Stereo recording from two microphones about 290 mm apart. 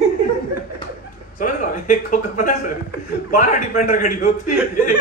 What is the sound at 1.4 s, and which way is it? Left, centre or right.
A man's voice, left.